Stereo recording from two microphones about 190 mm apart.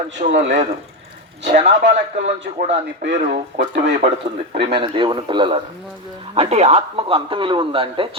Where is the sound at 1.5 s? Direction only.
40° right (ahead or behind).